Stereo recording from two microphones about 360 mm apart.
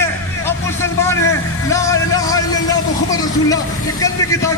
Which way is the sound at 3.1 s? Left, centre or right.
Centre.